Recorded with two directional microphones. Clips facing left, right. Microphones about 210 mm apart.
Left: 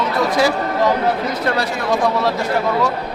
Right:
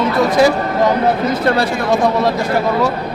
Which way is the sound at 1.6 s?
30° right (ahead or behind).